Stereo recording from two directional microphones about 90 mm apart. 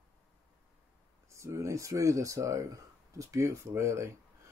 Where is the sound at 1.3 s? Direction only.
35° right (ahead or behind).